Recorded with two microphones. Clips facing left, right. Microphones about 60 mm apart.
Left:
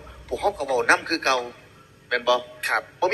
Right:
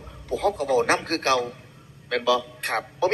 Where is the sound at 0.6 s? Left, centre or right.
Left.